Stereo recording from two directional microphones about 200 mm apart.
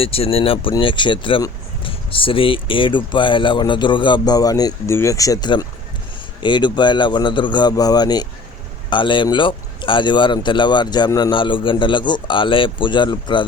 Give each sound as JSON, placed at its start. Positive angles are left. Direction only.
{"t": 0.0, "sound": "speech", "side_deg": 30}